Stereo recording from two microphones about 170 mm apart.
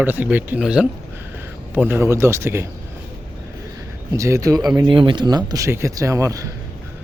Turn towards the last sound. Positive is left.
turn(degrees=-20)  # may be behind; listen again after turning